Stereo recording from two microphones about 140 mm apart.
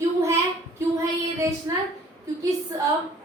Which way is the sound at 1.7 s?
25° right (ahead or behind).